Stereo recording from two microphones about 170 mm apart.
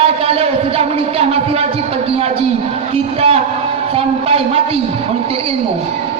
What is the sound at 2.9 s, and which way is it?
A man's voice, 35° right (ahead or behind).